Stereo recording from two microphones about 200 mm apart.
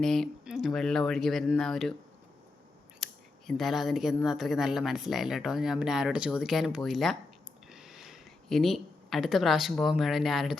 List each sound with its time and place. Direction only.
0.0 s speech: centre (ahead or behind)
3.0 s speech: centre (ahead or behind)